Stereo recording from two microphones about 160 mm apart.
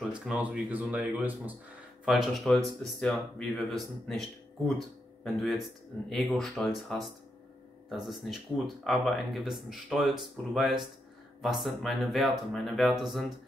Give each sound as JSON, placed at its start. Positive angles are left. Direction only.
{"t": 0.0, "sound": "speech", "side_deg": -5}
{"t": 7.9, "sound": "speech", "side_deg": 0}